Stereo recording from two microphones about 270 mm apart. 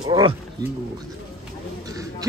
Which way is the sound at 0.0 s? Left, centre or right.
Centre.